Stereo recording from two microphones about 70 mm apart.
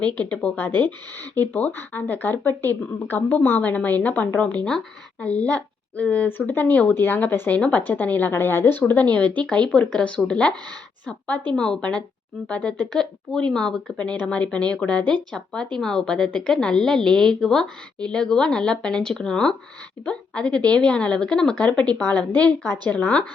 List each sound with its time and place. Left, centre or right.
0.1 s a woman's voice: centre
11.5 s a woman's voice: centre
21.5 s speech: left